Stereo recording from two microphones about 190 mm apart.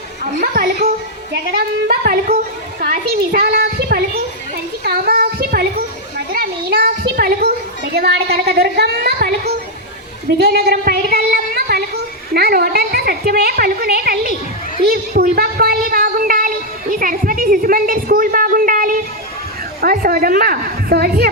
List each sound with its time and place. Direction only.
0.3 s a sound: 50° right (ahead or behind)
1.3 s a woman's voice: 55° right (ahead or behind)
4.8 s children playing: 55° right (ahead or behind)
7.9 s a woman's voice: 60° right (ahead or behind)
10.3 s a sound: 60° right (ahead or behind)
19.8 s a woman's voice: 50° right (ahead or behind)